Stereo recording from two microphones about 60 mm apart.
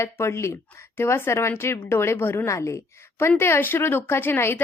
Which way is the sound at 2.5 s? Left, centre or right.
Left.